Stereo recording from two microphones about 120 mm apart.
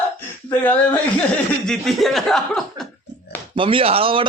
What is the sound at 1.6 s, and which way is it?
Speech, centre (ahead or behind).